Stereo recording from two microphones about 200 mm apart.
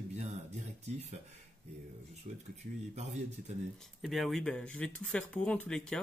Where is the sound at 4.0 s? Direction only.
Centre (ahead or behind).